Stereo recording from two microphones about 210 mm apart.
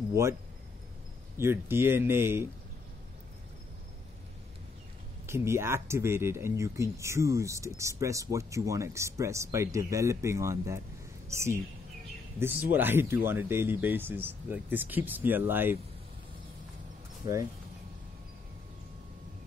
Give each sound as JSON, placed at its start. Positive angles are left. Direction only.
{"t": 0.1, "sound": "speech", "side_deg": -15}
{"t": 1.4, "sound": "speech", "side_deg": -10}
{"t": 5.2, "sound": "speech", "side_deg": -10}